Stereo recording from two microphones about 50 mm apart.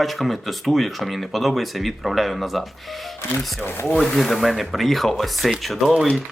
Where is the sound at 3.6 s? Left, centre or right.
Left.